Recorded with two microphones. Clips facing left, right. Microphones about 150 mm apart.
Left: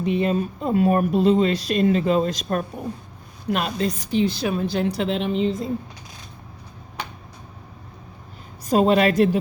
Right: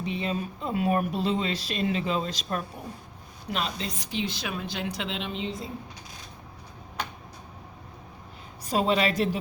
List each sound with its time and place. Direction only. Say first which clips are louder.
0.0 s speech: left 9 dB; 50° left (ahead or behind)
8.6 s speech: left 7 dB; 45° left (ahead or behind)